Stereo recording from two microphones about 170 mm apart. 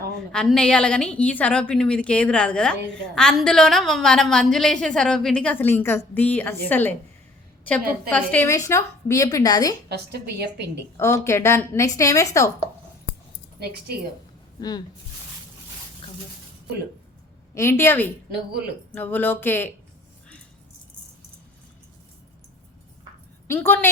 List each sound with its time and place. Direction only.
0.2 s a woman's voice: 5° left (ahead or behind)
8.1 s a woman's voice: 10° left (ahead or behind)
9.9 s a woman's voice: 75° right (ahead or behind)
10.9 s a woman's voice: 15° left (ahead or behind)
13.6 s a woman's voice: 70° right (ahead or behind)
14.6 s a woman's voice: 25° left (ahead or behind)
17.5 s a woman's voice: 15° left (ahead or behind)
23.5 s a woman's voice: 10° left (ahead or behind)